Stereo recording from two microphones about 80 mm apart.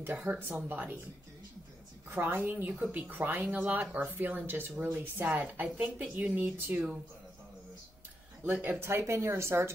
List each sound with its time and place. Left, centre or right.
0.3 s speech: right
2.0 s speech: right
8.5 s speech: right